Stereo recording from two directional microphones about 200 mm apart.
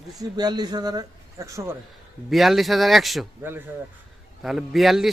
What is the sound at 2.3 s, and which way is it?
Speech, centre (ahead or behind).